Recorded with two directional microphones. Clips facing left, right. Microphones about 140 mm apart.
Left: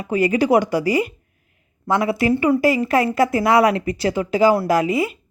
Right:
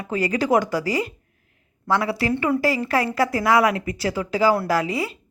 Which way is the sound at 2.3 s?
5° left (ahead or behind).